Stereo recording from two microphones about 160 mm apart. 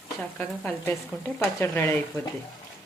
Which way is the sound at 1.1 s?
5° left (ahead or behind).